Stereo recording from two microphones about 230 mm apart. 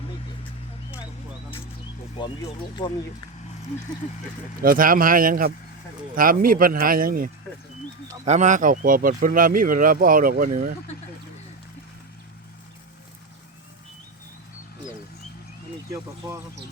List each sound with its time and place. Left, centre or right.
4.6 s speech: right